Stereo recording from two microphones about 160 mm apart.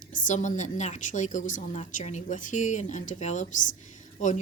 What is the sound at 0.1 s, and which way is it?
A woman's voice, 50° left (ahead or behind).